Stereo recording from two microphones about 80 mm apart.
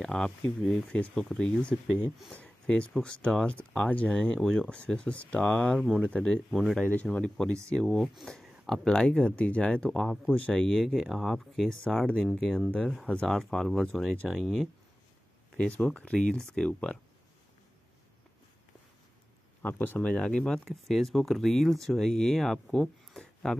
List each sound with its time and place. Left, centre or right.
0.0 s speech: centre
1.4 s speech: centre
2.4 s a sound: centre
3.0 s speech: centre
4.4 s speech: centre
5.8 s speech: centre
6.0 s speech: centre
6.5 s speech: centre
6.8 s speech: centre
9.8 s speech: centre
10.3 s speech: centre
10.6 s speech: centre
15.5 s speech: centre
19.6 s speech: left; by 23.6 s centre